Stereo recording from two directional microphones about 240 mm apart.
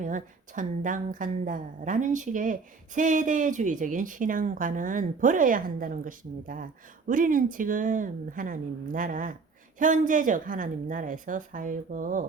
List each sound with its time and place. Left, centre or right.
0.0 s a woman's voice: right